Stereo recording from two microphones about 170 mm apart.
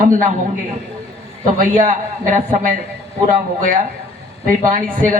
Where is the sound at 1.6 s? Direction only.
50° right (ahead or behind).